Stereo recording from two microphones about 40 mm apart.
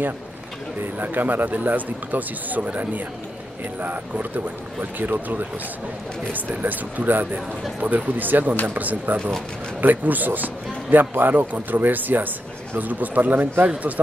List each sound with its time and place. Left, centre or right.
0.9 s a man's voice: right